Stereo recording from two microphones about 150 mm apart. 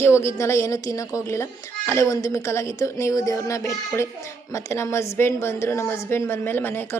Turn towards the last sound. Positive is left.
turn(degrees=15)  # may be behind; listen again after turning